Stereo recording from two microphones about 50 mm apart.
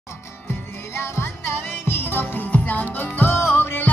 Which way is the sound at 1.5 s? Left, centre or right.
Left.